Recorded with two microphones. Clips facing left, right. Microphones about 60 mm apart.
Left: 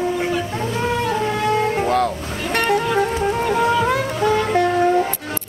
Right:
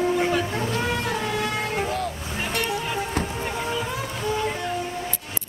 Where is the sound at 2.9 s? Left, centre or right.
Left.